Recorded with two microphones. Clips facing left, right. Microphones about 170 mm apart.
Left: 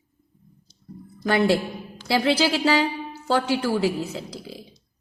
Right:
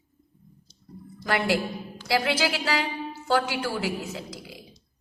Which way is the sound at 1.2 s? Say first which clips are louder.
Left 5 dB; 30° left (ahead or behind).